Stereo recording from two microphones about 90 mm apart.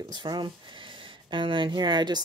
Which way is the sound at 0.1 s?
60° right (ahead or behind).